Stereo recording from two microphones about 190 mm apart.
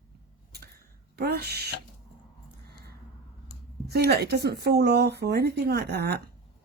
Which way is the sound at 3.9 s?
60° right (ahead or behind).